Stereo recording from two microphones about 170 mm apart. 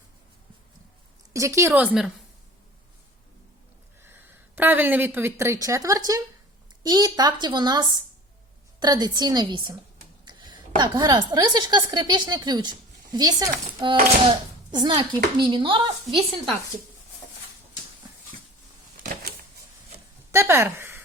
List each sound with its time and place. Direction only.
1.3 s speech: 20° right (ahead or behind)
4.5 s a child's voice: 10° right (ahead or behind)
10.2 s a sound: 25° right (ahead or behind)
10.8 s a child's voice: 25° right (ahead or behind)
20.3 s speech: 15° right (ahead or behind)